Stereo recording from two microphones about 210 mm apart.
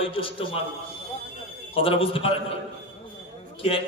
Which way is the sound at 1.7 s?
25° left (ahead or behind).